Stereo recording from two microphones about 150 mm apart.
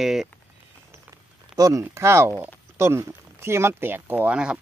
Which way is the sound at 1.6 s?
20° right (ahead or behind).